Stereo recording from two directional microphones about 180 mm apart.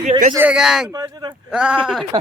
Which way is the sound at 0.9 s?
20° right (ahead or behind).